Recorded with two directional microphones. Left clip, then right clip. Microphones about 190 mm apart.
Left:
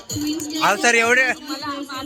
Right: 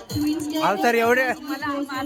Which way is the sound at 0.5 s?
5° right (ahead or behind).